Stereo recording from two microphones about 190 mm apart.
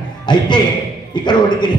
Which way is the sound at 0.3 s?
25° left (ahead or behind).